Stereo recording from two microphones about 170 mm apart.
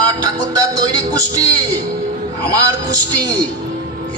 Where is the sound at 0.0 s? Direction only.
20° right (ahead or behind).